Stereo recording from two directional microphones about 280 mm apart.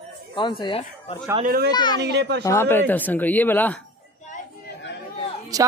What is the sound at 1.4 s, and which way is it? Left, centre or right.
Speech, right.